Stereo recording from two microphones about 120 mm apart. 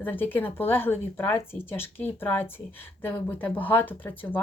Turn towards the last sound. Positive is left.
turn(degrees=15)  # may be behind; listen again after turning